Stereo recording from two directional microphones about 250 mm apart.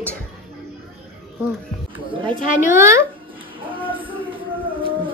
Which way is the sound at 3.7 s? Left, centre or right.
Right.